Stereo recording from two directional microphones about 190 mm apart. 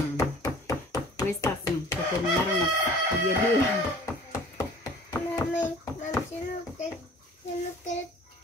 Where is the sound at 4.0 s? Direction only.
15° left (ahead or behind).